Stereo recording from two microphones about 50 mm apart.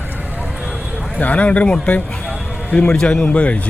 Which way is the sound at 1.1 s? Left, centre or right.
Left.